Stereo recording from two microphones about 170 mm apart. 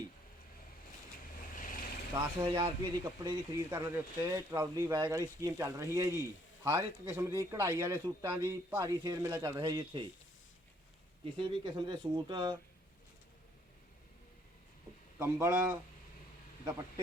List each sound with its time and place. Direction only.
1.5 s vehicle: 55° left (ahead or behind)
2.1 s speech: 20° right (ahead or behind)
11.3 s speech: 25° right (ahead or behind)
15.2 s speech: 15° right (ahead or behind)